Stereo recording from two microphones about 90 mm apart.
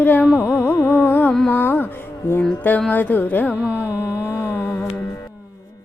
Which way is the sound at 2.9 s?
20° left (ahead or behind).